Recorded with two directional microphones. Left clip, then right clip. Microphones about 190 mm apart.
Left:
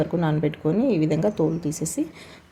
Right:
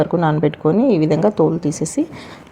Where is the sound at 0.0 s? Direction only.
15° right (ahead or behind).